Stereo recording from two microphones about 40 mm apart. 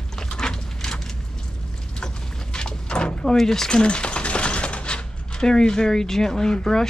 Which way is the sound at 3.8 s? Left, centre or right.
Left.